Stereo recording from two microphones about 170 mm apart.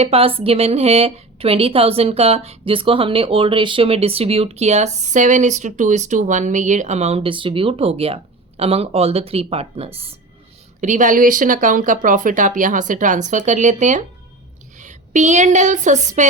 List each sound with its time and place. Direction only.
0.0 s a woman's voice: 35° right (ahead or behind)
10.8 s a woman's voice: 45° right (ahead or behind)